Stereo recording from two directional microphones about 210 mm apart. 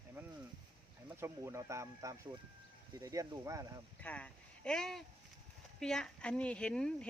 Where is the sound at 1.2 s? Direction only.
15° right (ahead or behind).